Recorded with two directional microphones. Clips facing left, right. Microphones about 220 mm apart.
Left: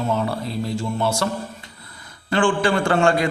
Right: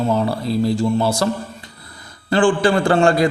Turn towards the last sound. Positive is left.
turn(degrees=-35)  # may be behind; listen again after turning